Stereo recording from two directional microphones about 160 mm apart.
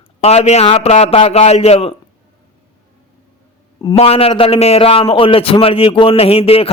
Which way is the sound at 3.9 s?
40° left (ahead or behind).